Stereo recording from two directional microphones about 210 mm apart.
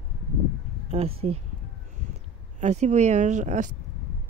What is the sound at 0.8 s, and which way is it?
Speech, 30° right (ahead or behind).